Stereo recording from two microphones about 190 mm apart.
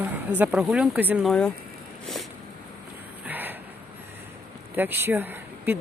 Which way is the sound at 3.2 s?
10° right (ahead or behind).